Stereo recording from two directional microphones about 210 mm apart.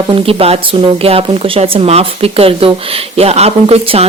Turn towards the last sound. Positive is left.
turn(degrees=-30)  # may be behind; listen again after turning